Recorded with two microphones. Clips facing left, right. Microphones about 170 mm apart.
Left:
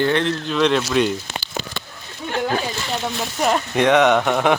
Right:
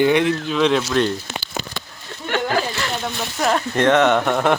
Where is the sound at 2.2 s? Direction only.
90° right.